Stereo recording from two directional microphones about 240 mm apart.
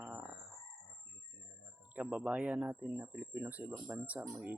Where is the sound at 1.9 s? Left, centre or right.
Centre.